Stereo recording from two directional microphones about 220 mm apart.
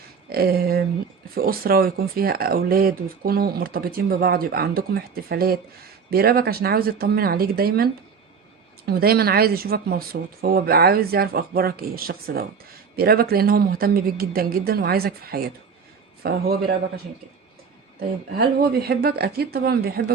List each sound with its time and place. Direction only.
0.3 s speech: 45° right (ahead or behind)
8.9 s speech: 45° right (ahead or behind)
18.3 s speech: 45° right (ahead or behind)